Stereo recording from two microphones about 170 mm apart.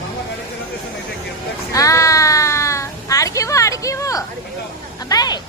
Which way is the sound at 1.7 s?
20° left (ahead or behind).